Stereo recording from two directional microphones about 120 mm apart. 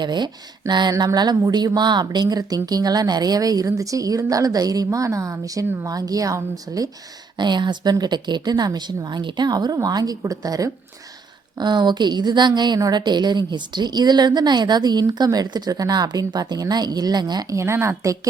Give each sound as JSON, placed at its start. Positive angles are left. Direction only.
{"t": 0.0, "sound": "a woman's voice", "side_deg": -40}